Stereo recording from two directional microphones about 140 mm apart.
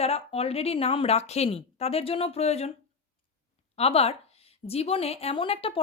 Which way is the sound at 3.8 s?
45° left (ahead or behind).